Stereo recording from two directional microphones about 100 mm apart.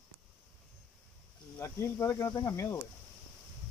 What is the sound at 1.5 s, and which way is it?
Cricket, 30° left (ahead or behind).